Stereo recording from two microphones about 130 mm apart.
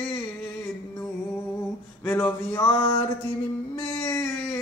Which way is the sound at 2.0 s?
15° left (ahead or behind).